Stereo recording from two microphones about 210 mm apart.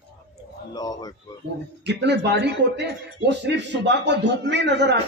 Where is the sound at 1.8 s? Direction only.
55° right (ahead or behind).